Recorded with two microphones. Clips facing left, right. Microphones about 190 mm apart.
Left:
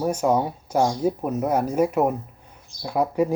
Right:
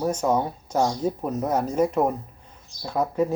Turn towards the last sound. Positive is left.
turn(degrees=10)  # may be behind; listen again after turning